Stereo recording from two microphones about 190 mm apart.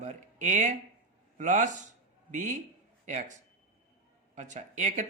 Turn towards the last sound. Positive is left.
turn(degrees=-40)  # may be behind; listen again after turning